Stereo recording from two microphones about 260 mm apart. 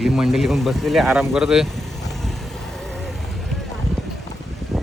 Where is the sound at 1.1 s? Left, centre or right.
Centre.